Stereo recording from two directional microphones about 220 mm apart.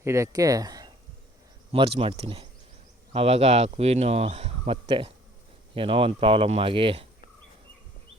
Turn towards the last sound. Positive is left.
turn(degrees=-25)  # may be behind; listen again after turning